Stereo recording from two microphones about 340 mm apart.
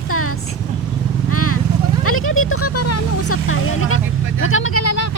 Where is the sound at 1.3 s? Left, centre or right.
Left.